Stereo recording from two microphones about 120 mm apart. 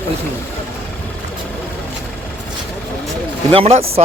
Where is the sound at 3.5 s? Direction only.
55° right (ahead or behind).